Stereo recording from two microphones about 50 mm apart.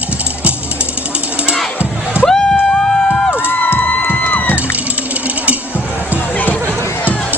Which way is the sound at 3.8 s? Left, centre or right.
Left.